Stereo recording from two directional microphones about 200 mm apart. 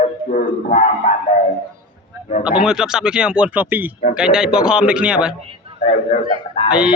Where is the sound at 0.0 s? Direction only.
35° left (ahead or behind).